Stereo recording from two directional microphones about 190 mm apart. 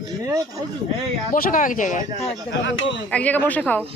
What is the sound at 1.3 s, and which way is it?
Speech, 45° left (ahead or behind).